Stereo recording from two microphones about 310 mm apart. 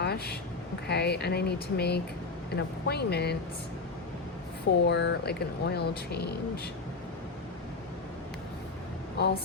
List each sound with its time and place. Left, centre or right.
0.0 s a sound: left
0.9 s speech: left
4.9 s speech: left
9.2 s speech: left